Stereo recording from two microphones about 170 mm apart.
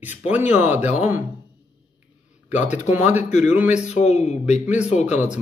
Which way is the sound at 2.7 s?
50° left (ahead or behind).